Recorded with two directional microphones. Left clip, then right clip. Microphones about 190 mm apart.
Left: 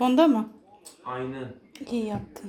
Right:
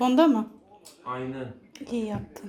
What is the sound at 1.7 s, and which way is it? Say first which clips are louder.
Speech: left 1 dB; 5° left (ahead or behind).